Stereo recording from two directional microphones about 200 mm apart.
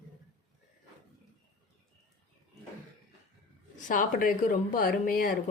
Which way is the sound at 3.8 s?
40° left (ahead or behind).